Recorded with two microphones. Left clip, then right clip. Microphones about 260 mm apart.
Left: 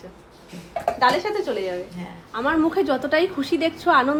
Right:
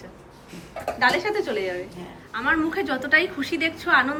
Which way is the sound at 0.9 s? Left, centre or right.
Centre.